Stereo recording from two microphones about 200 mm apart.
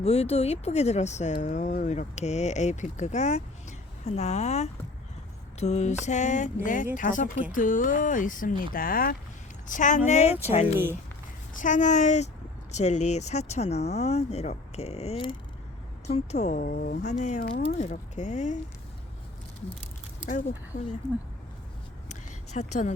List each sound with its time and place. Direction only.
0.0 s speech: 30° left (ahead or behind); by 17.0 s 50° left (ahead or behind)
17.0 s speech: 35° left (ahead or behind)
17.4 s speech: 55° left (ahead or behind)
17.7 s speech: 35° left (ahead or behind)
22.1 s a sound: 35° left (ahead or behind)